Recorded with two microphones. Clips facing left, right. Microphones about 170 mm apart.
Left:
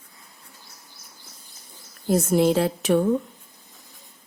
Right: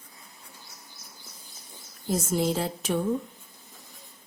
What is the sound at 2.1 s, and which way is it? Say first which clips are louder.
Speech: left 7 dB; 65° left (ahead or behind).